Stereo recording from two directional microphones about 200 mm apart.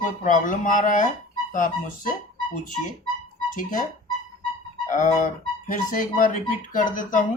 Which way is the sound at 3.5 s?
40° left (ahead or behind).